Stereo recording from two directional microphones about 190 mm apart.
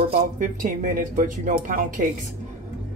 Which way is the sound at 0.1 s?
45° right (ahead or behind).